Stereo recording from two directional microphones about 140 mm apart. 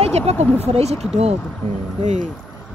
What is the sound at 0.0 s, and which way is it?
Speech, 50° right (ahead or behind).